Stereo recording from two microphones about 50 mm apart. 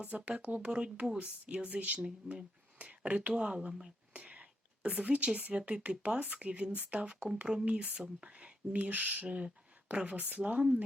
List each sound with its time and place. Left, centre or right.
0.0 s speech: right